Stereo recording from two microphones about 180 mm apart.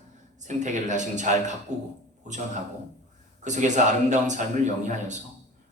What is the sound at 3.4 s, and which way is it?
Speech, 40° right (ahead or behind).